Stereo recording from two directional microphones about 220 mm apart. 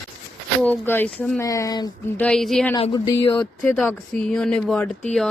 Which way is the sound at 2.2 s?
Centre (ahead or behind).